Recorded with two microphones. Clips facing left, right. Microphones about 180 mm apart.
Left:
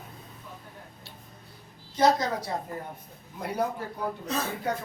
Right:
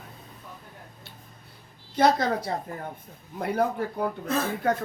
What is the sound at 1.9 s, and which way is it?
Speech, 55° right (ahead or behind).